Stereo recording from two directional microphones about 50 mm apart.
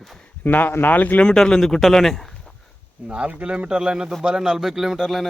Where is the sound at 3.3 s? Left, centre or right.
Right.